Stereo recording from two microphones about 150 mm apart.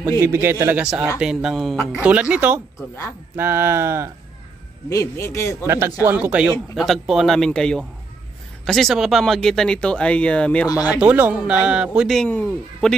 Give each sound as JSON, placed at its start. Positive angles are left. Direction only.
{"t": 0.2, "sound": "speech", "side_deg": -15}
{"t": 1.2, "sound": "speech", "side_deg": -5}
{"t": 4.8, "sound": "speech", "side_deg": 20}
{"t": 5.7, "sound": "speech", "side_deg": -15}
{"t": 10.9, "sound": "speech", "side_deg": -10}